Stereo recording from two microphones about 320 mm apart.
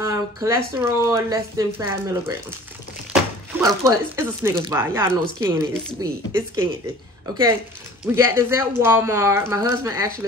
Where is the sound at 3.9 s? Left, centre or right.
Centre.